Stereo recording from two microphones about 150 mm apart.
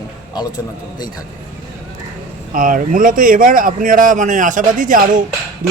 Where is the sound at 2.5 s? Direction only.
65° right (ahead or behind).